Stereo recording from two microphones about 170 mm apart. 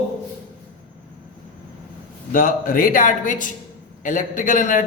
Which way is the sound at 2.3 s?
55° left (ahead or behind).